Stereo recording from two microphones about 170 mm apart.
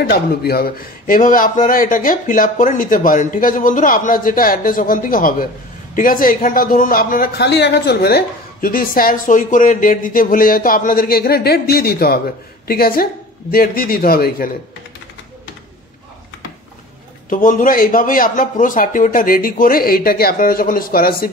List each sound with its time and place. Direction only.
0.0 s a man's voice: 65° left (ahead or behind)
17.3 s a man's voice: 50° left (ahead or behind)